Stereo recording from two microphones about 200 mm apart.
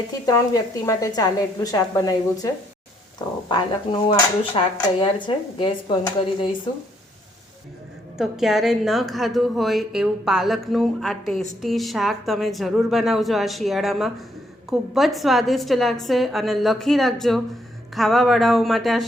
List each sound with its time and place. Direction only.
0.1 s a woman's voice: 15° left (ahead or behind)
3.5 s speech: 25° left (ahead or behind)
8.2 s a woman's voice: centre (ahead or behind)